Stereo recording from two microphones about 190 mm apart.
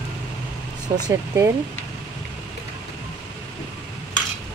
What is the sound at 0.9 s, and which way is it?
Speech, 15° right (ahead or behind).